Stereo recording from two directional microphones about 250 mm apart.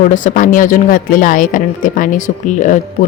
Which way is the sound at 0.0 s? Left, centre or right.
Left.